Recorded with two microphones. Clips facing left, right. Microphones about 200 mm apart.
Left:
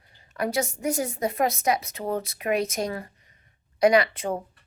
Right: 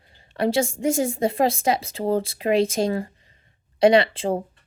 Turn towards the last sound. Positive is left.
turn(degrees=-30)  # may be behind; listen again after turning